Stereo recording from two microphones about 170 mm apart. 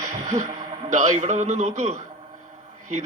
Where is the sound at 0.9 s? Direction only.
45° right (ahead or behind).